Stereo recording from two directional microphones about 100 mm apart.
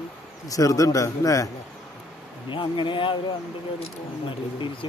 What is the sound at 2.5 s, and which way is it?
Speech, 55° left (ahead or behind).